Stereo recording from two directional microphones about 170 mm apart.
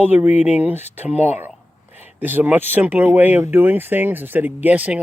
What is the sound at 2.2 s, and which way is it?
Speech, 10° right (ahead or behind).